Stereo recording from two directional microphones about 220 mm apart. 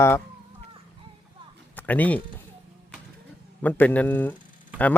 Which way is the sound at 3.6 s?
5° left (ahead or behind).